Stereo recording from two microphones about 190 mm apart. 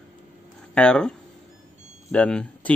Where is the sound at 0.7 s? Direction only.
5° left (ahead or behind).